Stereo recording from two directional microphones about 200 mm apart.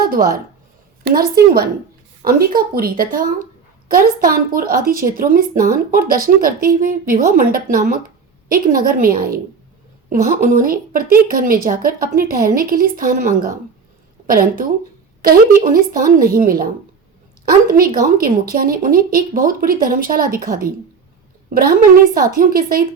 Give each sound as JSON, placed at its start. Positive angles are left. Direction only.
{"t": 0.0, "sound": "speech", "side_deg": -50}